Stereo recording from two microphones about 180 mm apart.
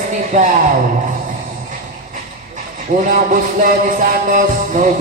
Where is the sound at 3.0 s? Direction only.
50° right (ahead or behind).